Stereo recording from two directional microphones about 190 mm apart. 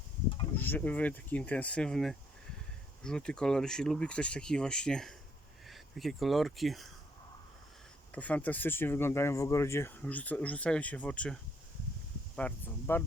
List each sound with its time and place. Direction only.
0.5 s speech: 10° left (ahead or behind)
8.1 s speech: 10° left (ahead or behind)
12.4 s speech: 5° left (ahead or behind)